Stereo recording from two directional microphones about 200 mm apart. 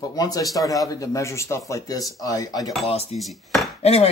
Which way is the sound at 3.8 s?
30° left (ahead or behind).